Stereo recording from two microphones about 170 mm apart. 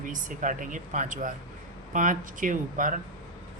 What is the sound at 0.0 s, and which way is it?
Speech, 50° right (ahead or behind).